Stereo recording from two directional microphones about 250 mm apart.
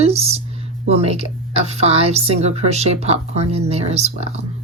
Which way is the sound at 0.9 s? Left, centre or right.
Right.